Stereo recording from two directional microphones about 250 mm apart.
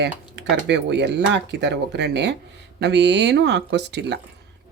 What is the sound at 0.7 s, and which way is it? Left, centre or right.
Speech, right.